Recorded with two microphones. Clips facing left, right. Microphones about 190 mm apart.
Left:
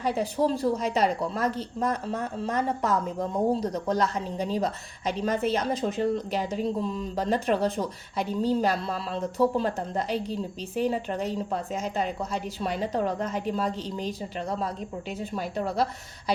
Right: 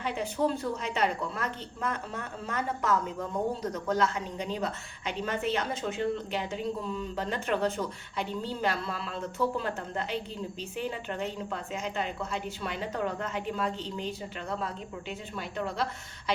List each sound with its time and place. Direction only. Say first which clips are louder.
0.0 s speech: left 4 dB; 35° left (ahead or behind)